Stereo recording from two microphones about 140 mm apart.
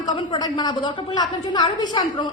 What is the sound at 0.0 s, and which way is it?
A woman's voice, 30° left (ahead or behind).